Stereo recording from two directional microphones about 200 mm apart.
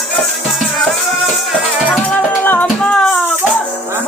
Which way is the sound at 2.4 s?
10° left (ahead or behind).